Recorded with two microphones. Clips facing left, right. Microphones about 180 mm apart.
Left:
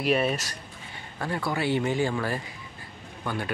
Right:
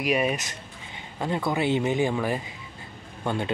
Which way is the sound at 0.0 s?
15° right (ahead or behind).